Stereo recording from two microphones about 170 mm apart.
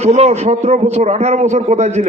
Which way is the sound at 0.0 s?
40° right (ahead or behind).